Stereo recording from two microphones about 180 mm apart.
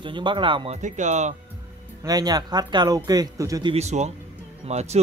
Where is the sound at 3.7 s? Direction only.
40° right (ahead or behind).